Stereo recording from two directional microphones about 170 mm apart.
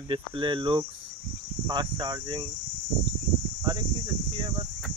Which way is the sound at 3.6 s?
25° right (ahead or behind).